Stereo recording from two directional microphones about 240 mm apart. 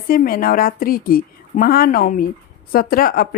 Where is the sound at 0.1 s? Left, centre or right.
Left.